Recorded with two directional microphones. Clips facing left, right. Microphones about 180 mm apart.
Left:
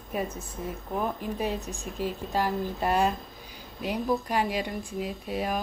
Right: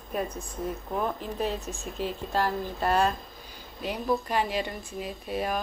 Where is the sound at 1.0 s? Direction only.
15° left (ahead or behind).